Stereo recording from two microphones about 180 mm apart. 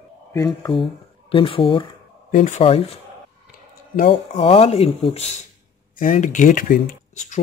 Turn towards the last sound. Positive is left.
turn(degrees=40)  # may be behind; listen again after turning